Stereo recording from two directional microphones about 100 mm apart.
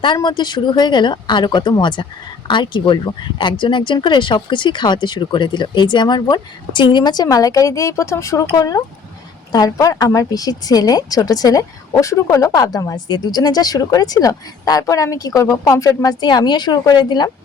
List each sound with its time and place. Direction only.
0.0 s a woman's voice: 50° left (ahead or behind)